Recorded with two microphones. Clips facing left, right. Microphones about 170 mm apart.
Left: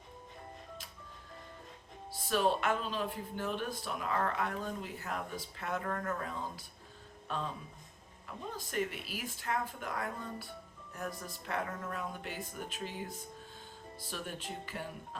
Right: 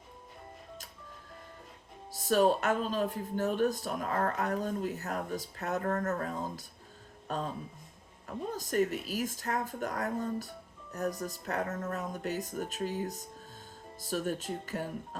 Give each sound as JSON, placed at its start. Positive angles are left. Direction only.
{"t": 2.1, "sound": "speech", "side_deg": -45}